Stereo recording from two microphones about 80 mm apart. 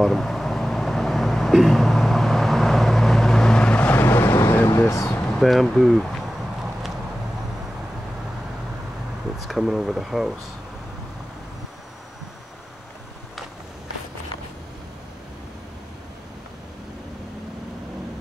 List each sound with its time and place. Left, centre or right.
0.0 s vehicle: centre
4.0 s vehicle: left
4.6 s a sound: left
5.4 s speech: centre
9.4 s speech: centre